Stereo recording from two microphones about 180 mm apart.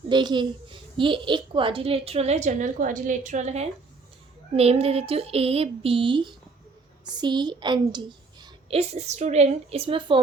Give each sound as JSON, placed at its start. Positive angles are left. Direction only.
{"t": 0.1, "sound": "a woman's voice", "side_deg": -25}
{"t": 8.8, "sound": "a woman's voice", "side_deg": -35}